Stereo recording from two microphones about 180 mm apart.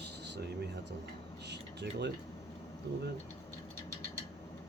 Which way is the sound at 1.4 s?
70° right (ahead or behind).